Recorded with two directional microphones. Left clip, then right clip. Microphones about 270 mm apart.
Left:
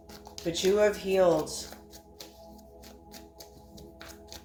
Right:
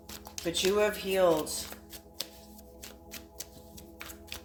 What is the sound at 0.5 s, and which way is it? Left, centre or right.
A woman's voice, right.